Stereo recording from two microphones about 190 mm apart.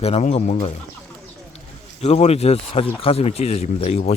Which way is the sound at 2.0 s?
35° left (ahead or behind).